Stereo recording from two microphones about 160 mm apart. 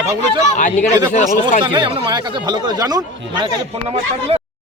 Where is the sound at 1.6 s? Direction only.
30° right (ahead or behind).